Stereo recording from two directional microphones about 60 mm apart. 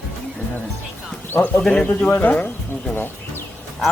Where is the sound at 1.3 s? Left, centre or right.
Left.